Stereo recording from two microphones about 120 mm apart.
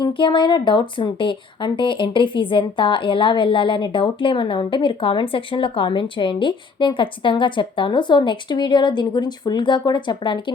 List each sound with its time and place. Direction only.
0.0 s speech: 40° left (ahead or behind)